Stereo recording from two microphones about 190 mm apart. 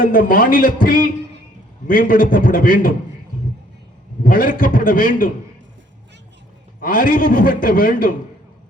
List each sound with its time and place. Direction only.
0.0 s a man's voice: 45° left (ahead or behind)
4.2 s a man's voice: 45° left (ahead or behind)
6.8 s a man's voice: 50° left (ahead or behind)